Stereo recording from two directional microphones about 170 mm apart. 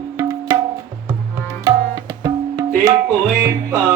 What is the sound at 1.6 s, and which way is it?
Tabla, 20° right (ahead or behind).